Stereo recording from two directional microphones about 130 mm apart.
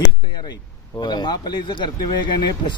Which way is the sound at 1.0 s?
35° left (ahead or behind).